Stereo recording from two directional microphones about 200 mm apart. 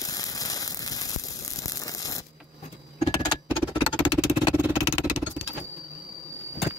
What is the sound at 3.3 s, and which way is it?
Music, 25° left (ahead or behind).